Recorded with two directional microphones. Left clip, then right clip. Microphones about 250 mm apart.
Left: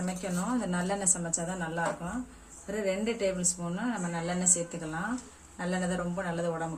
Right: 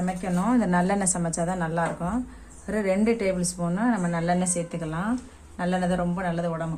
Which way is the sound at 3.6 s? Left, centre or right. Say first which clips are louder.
Right 8 dB; right.